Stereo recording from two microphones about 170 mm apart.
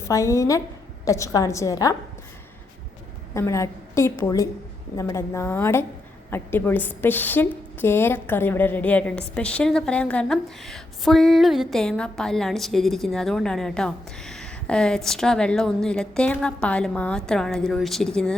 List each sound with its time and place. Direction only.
0.0 s a woman's voice: 20° left (ahead or behind)
3.3 s a woman's voice: 15° left (ahead or behind)